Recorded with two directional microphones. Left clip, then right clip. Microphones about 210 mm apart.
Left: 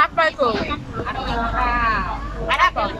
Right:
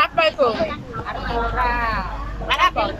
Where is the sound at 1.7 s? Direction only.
25° right (ahead or behind).